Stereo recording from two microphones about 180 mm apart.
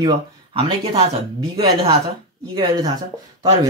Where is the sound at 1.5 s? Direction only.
20° right (ahead or behind).